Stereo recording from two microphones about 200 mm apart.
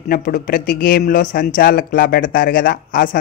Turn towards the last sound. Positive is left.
turn(degrees=45)  # may be behind; listen again after turning